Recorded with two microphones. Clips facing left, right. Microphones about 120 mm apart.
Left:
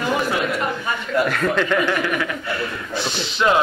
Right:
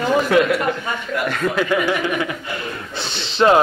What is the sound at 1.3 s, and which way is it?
Speech, 5° right (ahead or behind).